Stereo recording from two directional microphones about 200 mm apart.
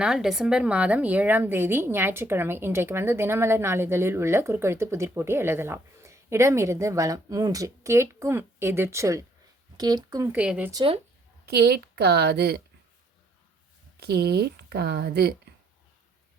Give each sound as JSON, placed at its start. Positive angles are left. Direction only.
{"t": 0.0, "sound": "speech", "side_deg": 0}
{"t": 10.7, "sound": "speech", "side_deg": -20}
{"t": 11.4, "sound": "speech", "side_deg": -55}
{"t": 14.0, "sound": "speech", "side_deg": -55}